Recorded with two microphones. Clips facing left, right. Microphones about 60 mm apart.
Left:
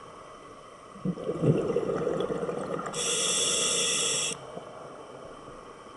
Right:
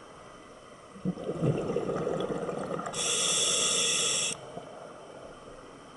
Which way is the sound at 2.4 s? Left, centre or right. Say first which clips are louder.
Left 2 dB; centre.